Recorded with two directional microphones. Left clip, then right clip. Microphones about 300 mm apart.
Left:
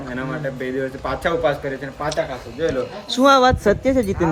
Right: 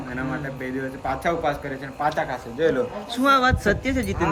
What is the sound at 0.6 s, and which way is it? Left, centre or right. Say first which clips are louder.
Speech: left 2 dB; centre.